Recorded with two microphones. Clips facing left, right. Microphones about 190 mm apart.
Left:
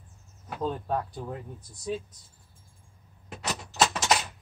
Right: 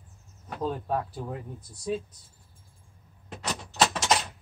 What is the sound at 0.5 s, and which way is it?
Speech, 5° right (ahead or behind).